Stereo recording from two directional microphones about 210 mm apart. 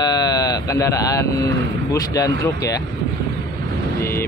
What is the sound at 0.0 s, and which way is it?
Speech, 20° left (ahead or behind).